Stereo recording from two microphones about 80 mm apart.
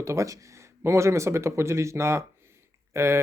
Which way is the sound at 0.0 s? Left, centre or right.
Right.